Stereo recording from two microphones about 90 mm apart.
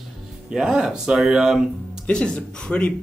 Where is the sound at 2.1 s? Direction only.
10° left (ahead or behind).